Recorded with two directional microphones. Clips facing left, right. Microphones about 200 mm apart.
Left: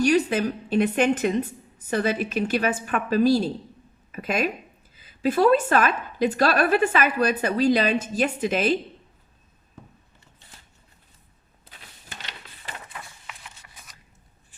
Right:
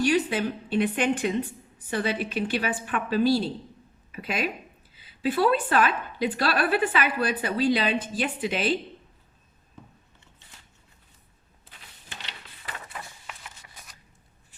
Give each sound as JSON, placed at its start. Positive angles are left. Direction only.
{"t": 0.0, "sound": "a woman's voice", "side_deg": 45}